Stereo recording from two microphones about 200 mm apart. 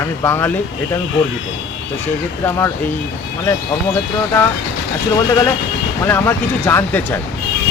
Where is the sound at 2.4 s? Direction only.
10° left (ahead or behind).